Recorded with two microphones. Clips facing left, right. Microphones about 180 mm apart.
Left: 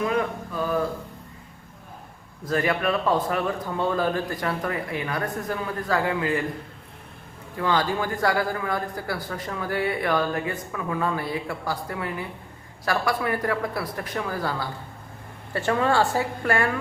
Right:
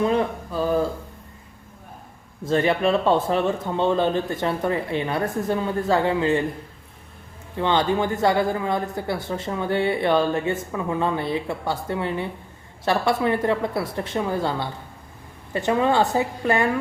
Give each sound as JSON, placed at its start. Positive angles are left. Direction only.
{"t": 0.0, "sound": "speech", "side_deg": -30}
{"t": 2.4, "sound": "speech", "side_deg": -25}
{"t": 7.5, "sound": "speech", "side_deg": -25}